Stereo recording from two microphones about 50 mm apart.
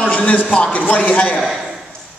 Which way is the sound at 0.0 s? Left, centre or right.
Left.